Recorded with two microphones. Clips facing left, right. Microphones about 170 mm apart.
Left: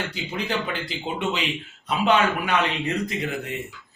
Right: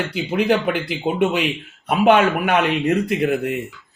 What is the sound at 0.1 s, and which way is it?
Speech, 60° right (ahead or behind).